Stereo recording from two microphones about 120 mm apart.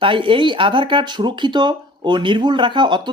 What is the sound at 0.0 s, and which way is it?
Speech, 45° right (ahead or behind).